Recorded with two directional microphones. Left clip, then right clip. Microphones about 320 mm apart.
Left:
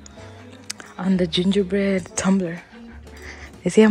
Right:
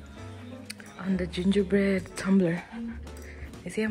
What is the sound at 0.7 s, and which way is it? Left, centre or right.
Speech, centre.